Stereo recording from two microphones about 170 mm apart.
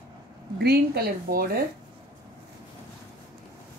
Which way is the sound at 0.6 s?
65° right (ahead or behind).